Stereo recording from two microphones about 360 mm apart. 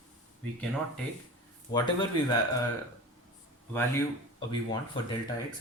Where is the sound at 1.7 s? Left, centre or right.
Centre.